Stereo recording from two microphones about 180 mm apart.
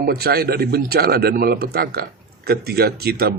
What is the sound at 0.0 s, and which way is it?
Speech, 60° right (ahead or behind).